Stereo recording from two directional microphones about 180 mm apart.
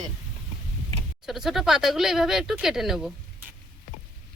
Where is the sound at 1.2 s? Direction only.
Centre (ahead or behind).